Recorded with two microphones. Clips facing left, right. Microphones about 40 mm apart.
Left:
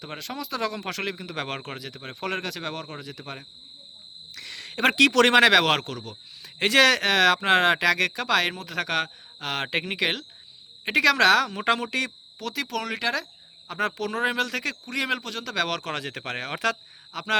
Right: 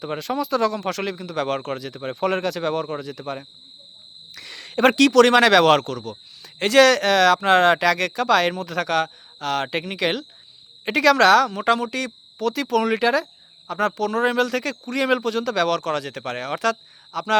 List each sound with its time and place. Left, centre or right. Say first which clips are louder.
0.0 s speech: right 9 dB; centre
0.6 s speech: right 6 dB; centre
1.9 s speech: right 8 dB; centre
4.4 s a sound: right 7 dB; centre
4.9 s speech: right 3 dB; left
5.4 s speech: right 4 dB; centre
10.0 s speech: right 3 dB; centre
12.4 s speech: right 9 dB; centre
12.8 s speech: right 8 dB; centre
13.7 s speech: right 5 dB; left
14.3 s speech: right 5 dB; centre
15.6 s speech: right 7 dB; centre